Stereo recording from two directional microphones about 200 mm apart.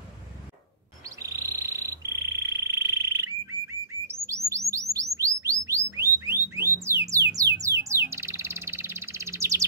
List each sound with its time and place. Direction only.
1.0 s insect: 15° right (ahead or behind)
4.5 s bird: 15° right (ahead or behind)
6.1 s alarm: 10° right (ahead or behind)
7.1 s music: 15° right (ahead or behind)
8.1 s bird: 15° right (ahead or behind)